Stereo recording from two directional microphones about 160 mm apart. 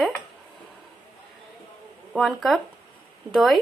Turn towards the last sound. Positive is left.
turn(degrees=0)  # may be behind; listen again after turning